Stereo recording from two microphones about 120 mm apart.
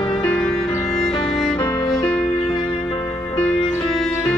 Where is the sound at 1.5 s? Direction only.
40° left (ahead or behind).